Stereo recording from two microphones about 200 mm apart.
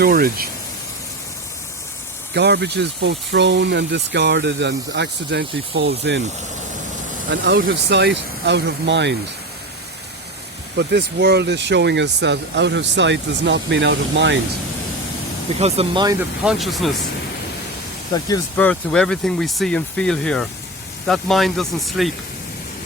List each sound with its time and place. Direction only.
0.0 s speech: 45° right (ahead or behind)
2.3 s speech: 55° right (ahead or behind)
7.3 s speech: 60° right (ahead or behind)
10.8 s speech: 55° right (ahead or behind)
15.5 s speech: 30° right (ahead or behind)
16.4 s speech: centre (ahead or behind)
18.1 s speech: 20° left (ahead or behind); by 22.1 s centre (ahead or behind)